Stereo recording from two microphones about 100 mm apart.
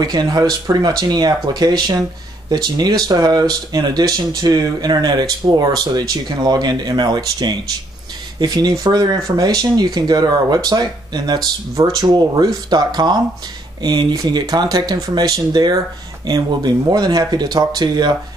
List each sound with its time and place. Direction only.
0.0 s speech: 45° right (ahead or behind)